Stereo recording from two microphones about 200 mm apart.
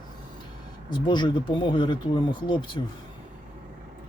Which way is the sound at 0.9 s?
20° left (ahead or behind).